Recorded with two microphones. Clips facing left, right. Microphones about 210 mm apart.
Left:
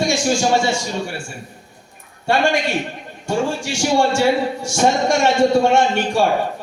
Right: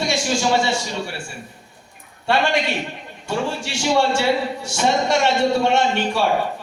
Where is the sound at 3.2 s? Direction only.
45° left (ahead or behind).